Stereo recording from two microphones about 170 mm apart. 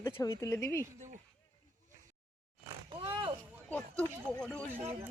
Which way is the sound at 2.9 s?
30° right (ahead or behind).